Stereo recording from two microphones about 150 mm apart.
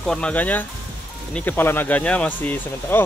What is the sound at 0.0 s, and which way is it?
Speech, 5° left (ahead or behind).